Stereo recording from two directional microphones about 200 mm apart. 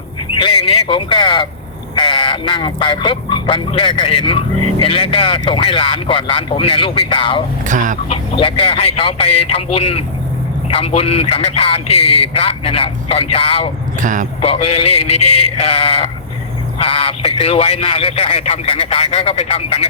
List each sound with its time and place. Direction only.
0.3 s speech: 25° left (ahead or behind)
7.7 s speech: 40° right (ahead or behind)
8.4 s speech: 30° left (ahead or behind)
14.0 s speech: 40° right (ahead or behind)
14.4 s speech: 30° left (ahead or behind)